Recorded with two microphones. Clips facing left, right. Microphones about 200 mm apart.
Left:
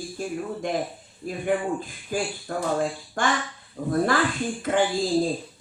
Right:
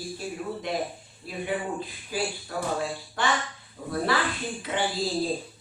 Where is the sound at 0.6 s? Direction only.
45° left (ahead or behind).